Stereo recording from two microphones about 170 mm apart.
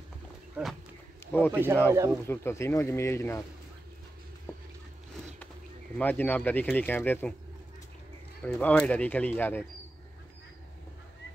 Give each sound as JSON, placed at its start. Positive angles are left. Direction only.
{"t": 0.6, "sound": "speech", "side_deg": -10}
{"t": 1.2, "sound": "a sound", "side_deg": 10}
{"t": 1.5, "sound": "speech", "side_deg": -10}
{"t": 2.2, "sound": "speech", "side_deg": 15}
{"t": 4.5, "sound": "a sound", "side_deg": 15}
{"t": 5.9, "sound": "speech", "side_deg": 10}
{"t": 8.4, "sound": "speech", "side_deg": 10}